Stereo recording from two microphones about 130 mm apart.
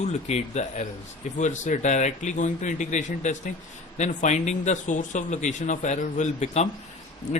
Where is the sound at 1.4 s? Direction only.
70° left (ahead or behind).